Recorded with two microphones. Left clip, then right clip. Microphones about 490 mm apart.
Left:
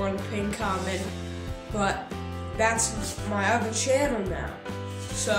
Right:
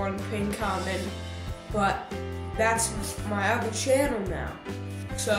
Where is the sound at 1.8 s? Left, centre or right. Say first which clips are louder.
Right 1 dB; right.